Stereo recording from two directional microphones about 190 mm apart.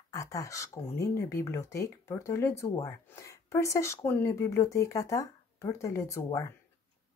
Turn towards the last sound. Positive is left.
turn(degrees=15)  # may be behind; listen again after turning